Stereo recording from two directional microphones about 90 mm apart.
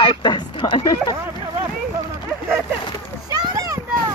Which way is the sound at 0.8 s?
45° left (ahead or behind).